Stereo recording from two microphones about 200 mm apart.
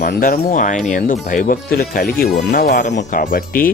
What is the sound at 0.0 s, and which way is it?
Speech, 50° left (ahead or behind).